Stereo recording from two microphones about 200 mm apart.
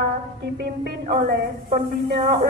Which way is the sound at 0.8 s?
45° right (ahead or behind).